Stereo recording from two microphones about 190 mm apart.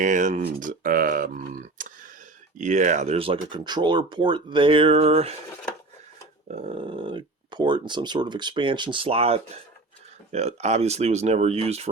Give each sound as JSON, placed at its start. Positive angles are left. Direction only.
{"t": 0.0, "sound": "speech", "side_deg": -40}
{"t": 6.5, "sound": "speech", "side_deg": -30}